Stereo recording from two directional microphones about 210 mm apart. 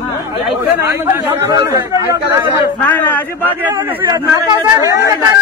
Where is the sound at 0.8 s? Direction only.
15° right (ahead or behind).